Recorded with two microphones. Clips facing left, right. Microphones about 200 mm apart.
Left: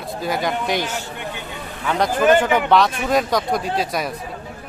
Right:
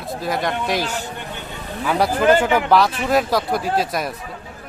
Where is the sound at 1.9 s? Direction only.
5° right (ahead or behind).